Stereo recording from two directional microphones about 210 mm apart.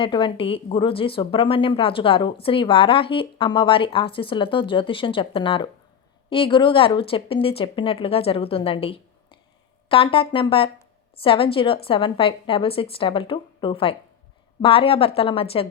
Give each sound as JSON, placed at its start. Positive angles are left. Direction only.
{"t": 0.0, "sound": "a woman's voice", "side_deg": 20}